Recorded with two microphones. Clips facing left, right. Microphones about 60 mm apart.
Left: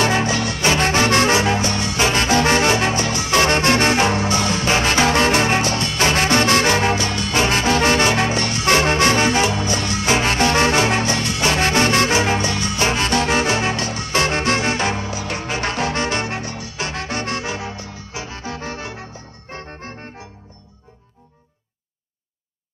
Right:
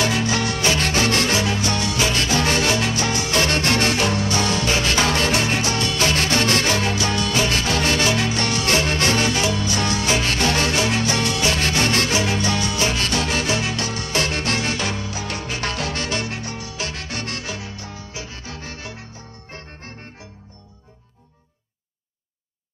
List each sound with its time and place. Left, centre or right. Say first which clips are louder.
0.0 s music: left 3 dB; left